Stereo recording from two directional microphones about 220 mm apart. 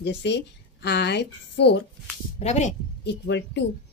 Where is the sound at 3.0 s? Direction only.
50° left (ahead or behind).